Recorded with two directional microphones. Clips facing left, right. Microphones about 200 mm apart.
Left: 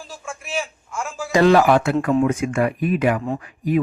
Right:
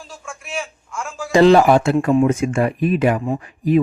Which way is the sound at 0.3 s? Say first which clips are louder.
Left 1 dB; 5° left (ahead or behind).